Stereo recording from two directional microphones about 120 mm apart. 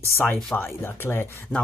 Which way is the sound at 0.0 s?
15° left (ahead or behind).